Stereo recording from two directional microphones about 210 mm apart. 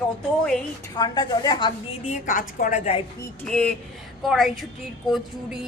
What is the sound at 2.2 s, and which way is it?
Speech, 40° left (ahead or behind).